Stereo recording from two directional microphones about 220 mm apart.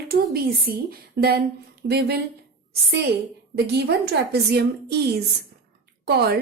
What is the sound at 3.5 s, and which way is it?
A woman's voice, 45° right (ahead or behind).